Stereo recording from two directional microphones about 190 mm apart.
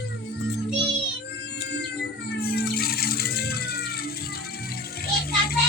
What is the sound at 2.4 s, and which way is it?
Rattle, 55° left (ahead or behind).